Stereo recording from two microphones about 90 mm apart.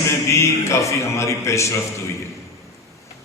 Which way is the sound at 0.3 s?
35° left (ahead or behind).